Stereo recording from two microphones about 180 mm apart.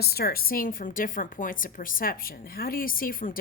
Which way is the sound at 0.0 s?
60° left (ahead or behind).